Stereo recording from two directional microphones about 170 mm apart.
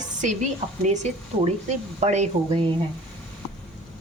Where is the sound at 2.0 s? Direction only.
40° right (ahead or behind).